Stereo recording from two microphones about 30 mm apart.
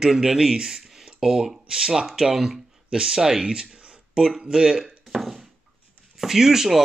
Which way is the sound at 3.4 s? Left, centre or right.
Right.